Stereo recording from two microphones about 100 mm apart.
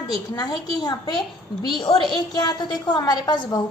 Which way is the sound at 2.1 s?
45° left (ahead or behind).